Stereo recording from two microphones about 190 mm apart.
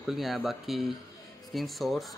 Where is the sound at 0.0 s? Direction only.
Centre (ahead or behind).